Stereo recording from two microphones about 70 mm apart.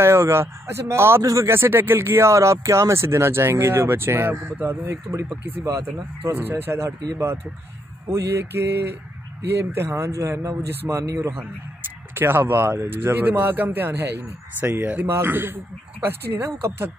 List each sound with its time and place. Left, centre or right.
0.0 s speech: right
5.1 s speech: right
6.3 s speech: right
8.1 s speech: right
12.1 s speech: right
14.6 s speech: right
15.0 s speech: right